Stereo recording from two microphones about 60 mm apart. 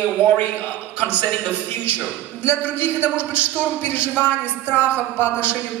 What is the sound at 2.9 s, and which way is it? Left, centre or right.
Speech, right.